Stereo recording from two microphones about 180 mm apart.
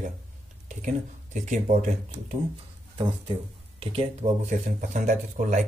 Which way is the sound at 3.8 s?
35° right (ahead or behind).